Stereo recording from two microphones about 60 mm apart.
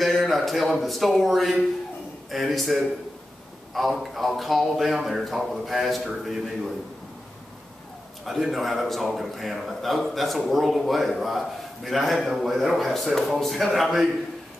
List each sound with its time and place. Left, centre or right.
0.0 s a man's voice: centre
8.3 s a man's voice: centre